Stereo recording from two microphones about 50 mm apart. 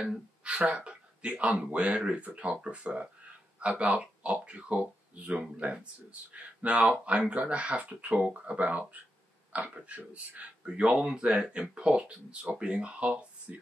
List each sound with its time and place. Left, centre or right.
0.4 s speech: right